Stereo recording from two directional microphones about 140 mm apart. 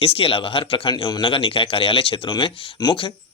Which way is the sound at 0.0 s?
40° left (ahead or behind).